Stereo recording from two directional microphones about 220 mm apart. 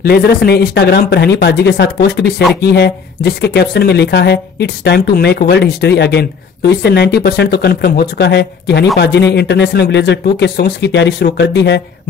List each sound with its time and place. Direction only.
0.0 s speech: 45° left (ahead or behind)